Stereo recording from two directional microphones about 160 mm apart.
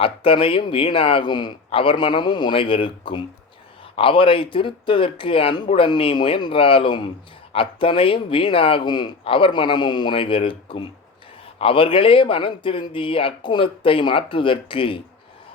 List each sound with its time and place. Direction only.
0.0 s speech: 35° left (ahead or behind)